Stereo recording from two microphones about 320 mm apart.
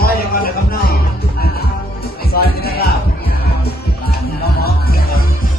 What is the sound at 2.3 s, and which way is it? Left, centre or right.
Music, left.